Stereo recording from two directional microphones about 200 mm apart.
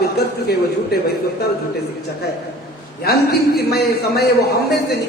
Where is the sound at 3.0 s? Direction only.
55° left (ahead or behind).